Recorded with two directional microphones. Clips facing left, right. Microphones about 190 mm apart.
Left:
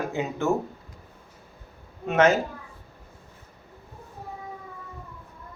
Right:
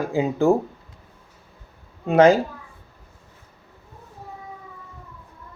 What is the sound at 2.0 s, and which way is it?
Speech, 35° right (ahead or behind).